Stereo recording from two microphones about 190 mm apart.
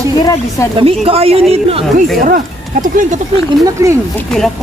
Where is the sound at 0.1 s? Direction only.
20° left (ahead or behind).